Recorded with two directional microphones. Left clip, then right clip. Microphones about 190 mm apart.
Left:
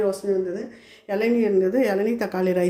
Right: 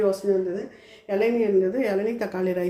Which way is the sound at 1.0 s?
20° left (ahead or behind).